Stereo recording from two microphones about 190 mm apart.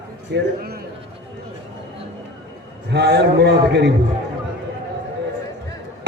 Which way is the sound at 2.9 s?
60° right (ahead or behind).